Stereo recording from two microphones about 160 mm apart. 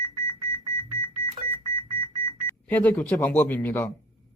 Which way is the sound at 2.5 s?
10° left (ahead or behind).